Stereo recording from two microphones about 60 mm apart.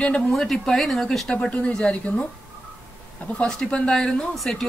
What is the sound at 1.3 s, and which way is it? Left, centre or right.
Speech, centre.